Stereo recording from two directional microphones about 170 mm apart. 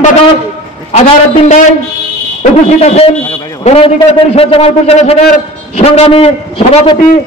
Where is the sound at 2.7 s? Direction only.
35° left (ahead or behind).